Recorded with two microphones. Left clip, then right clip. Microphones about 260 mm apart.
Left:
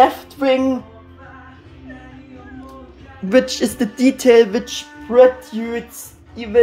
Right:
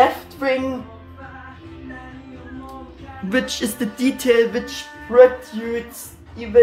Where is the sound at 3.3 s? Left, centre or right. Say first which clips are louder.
Left 6 dB; centre.